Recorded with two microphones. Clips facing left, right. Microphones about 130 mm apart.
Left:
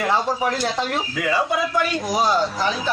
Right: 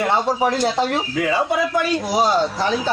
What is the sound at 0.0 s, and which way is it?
Speech, 25° right (ahead or behind).